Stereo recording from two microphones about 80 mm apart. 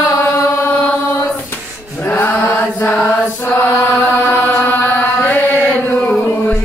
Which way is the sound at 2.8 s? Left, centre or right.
Centre.